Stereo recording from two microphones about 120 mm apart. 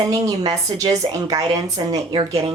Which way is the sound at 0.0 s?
30° right (ahead or behind).